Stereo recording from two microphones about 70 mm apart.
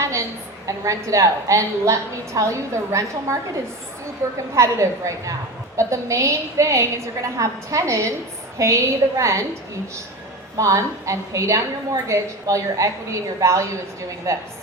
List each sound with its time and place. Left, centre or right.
0.0 s a sound: right
0.7 s a woman's voice: right
4.5 s a woman's voice: right
10.6 s a woman's voice: right